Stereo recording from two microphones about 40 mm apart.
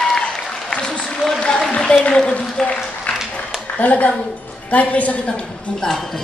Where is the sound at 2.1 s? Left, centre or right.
Left.